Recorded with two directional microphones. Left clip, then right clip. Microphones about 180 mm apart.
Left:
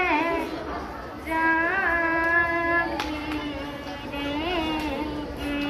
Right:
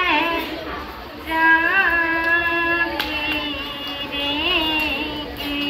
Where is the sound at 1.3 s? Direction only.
10° left (ahead or behind).